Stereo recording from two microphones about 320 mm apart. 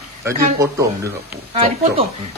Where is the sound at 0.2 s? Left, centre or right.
Centre.